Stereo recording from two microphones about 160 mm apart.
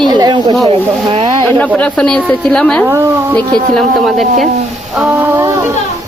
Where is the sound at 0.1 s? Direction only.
25° right (ahead or behind).